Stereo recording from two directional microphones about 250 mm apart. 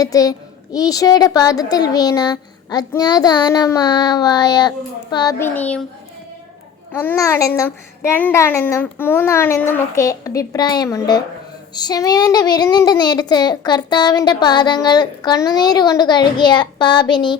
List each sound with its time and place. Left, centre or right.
0.0 s speech: centre
7.0 s speech: centre